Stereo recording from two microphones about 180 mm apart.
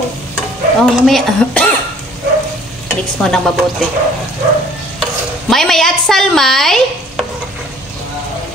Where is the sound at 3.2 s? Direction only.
5° left (ahead or behind).